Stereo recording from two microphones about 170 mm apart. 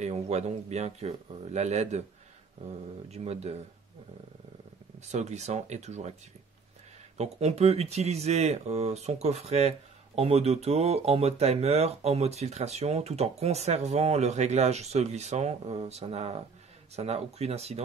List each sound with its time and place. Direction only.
0.0 s speech: 40° right (ahead or behind)
3.1 s speech: 40° right (ahead or behind)
5.0 s speech: 40° right (ahead or behind)
7.2 s speech: 40° right (ahead or behind)